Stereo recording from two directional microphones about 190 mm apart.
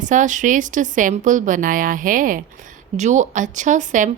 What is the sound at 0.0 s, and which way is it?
Speech, 40° right (ahead or behind).